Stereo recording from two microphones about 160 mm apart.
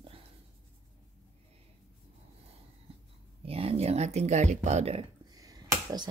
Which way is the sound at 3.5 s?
40° right (ahead or behind).